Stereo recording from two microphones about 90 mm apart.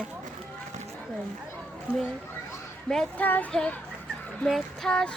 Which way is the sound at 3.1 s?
20° left (ahead or behind).